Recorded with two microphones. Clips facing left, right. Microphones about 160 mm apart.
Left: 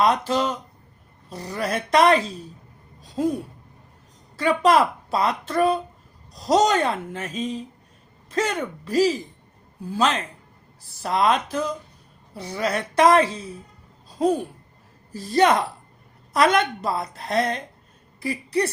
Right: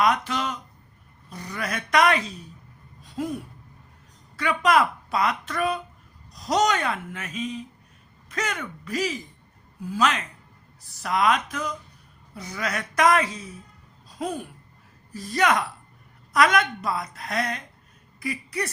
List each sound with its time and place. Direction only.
0.0 s a woman's voice: 30° left (ahead or behind)
4.4 s a woman's voice: 30° left (ahead or behind)
15.1 s a woman's voice: 30° left (ahead or behind)